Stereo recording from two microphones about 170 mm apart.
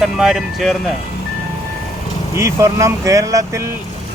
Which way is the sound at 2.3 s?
20° right (ahead or behind).